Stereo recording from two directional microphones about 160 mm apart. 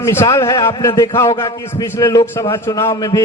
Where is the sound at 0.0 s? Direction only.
15° left (ahead or behind).